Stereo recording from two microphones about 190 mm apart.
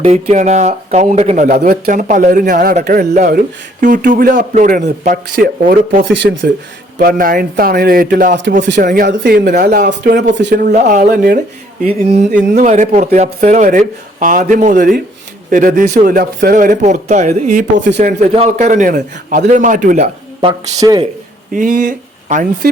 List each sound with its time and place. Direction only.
0.0 s speech: 35° right (ahead or behind)
1.7 s speech: 55° right (ahead or behind)
2.0 s speech: 40° right (ahead or behind); by 10.2 s 60° right (ahead or behind)
10.5 s speech: 45° right (ahead or behind)
20.4 s speech: 20° right (ahead or behind)
21.5 s speech: 45° right (ahead or behind)